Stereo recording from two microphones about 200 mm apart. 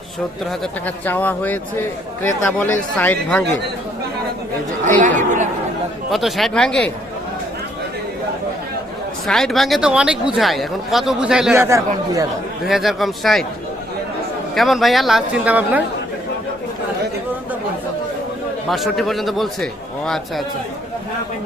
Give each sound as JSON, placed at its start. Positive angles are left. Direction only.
{"t": 0.6, "sound": "speech", "side_deg": 10}
{"t": 4.9, "sound": "speech", "side_deg": -40}
{"t": 6.1, "sound": "speech", "side_deg": 0}
{"t": 9.2, "sound": "speech", "side_deg": 0}
{"t": 12.6, "sound": "speech", "side_deg": 0}
{"t": 14.5, "sound": "speech", "side_deg": 0}
{"t": 18.7, "sound": "speech", "side_deg": 0}